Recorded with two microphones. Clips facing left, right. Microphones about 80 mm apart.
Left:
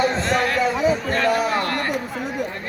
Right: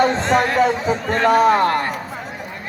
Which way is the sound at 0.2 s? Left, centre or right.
Right.